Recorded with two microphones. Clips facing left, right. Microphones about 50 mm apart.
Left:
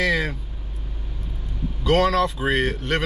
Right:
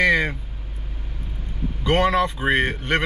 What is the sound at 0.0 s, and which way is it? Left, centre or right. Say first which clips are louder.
Vehicle: right 3 dB; centre.